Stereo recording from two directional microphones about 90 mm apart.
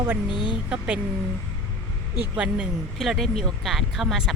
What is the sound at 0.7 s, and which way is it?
Speech, 10° right (ahead or behind).